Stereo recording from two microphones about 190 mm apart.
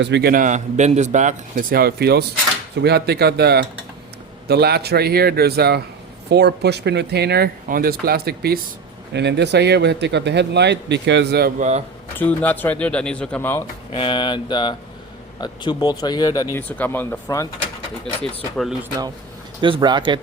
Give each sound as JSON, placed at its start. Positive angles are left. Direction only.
{"t": 0.0, "sound": "speech", "side_deg": -60}
{"t": 12.1, "sound": "speech", "side_deg": 10}
{"t": 13.9, "sound": "a sound", "side_deg": 25}
{"t": 15.4, "sound": "speech", "side_deg": 20}
{"t": 18.0, "sound": "speech", "side_deg": 5}
{"t": 19.6, "sound": "speech", "side_deg": -25}